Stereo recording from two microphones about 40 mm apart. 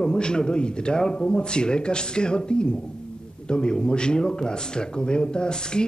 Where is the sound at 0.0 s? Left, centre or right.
Left.